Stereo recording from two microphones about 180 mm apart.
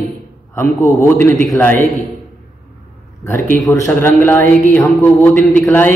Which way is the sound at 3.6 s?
15° left (ahead or behind).